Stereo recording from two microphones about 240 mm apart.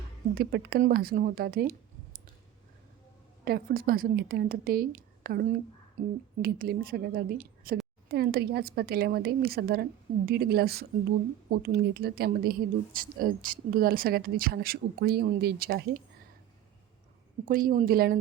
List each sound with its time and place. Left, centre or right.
0.3 s speech: right
3.4 s speech: right
17.4 s speech: right